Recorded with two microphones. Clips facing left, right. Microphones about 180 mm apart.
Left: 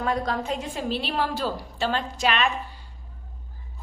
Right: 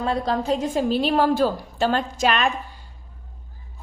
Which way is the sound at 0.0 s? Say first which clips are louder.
Right 3 dB; 30° right (ahead or behind).